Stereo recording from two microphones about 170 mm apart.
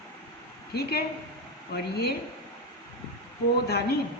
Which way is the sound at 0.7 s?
70° left (ahead or behind).